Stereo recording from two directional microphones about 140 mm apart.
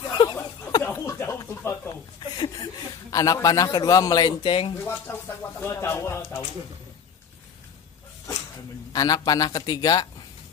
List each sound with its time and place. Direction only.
0.1 s a sound: 30° left (ahead or behind)
2.3 s a man's voice: 30° left (ahead or behind)
4.8 s speech: 15° left (ahead or behind)
8.9 s speech: 25° left (ahead or behind)